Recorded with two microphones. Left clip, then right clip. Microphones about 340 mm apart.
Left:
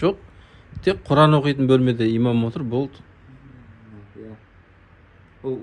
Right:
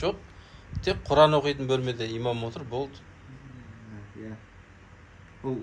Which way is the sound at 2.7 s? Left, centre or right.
Left.